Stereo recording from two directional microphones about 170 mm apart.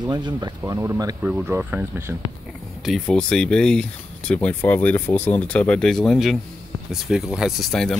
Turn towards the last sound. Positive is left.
turn(degrees=0)  # may be behind; listen again after turning